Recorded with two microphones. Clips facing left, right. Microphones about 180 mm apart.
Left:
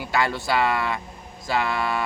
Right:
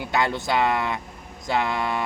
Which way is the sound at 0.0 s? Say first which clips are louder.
Even; 20° right (ahead or behind).